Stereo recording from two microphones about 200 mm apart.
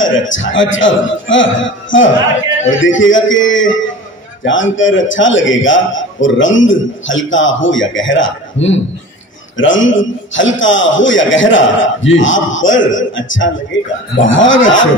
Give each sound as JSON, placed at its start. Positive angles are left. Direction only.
{"t": 0.0, "sound": "a man's voice", "side_deg": 70}